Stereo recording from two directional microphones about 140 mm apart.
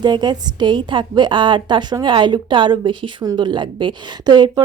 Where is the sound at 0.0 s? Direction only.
30° right (ahead or behind).